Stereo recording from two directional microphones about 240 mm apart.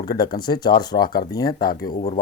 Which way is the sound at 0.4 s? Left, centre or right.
Centre.